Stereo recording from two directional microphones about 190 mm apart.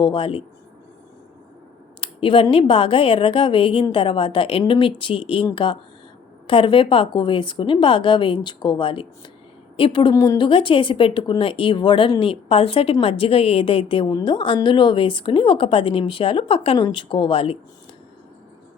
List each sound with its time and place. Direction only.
0.0 s a woman's voice: 25° left (ahead or behind)
2.0 s a woman's voice: 25° left (ahead or behind)